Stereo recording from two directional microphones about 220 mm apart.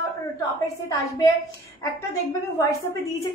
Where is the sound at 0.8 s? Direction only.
15° left (ahead or behind).